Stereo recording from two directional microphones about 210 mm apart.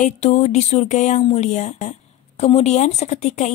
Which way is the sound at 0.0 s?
35° left (ahead or behind).